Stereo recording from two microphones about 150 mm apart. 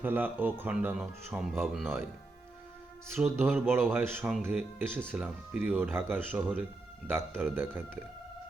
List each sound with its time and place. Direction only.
0.0 s speech: 10° right (ahead or behind)
3.2 s speech: 15° right (ahead or behind)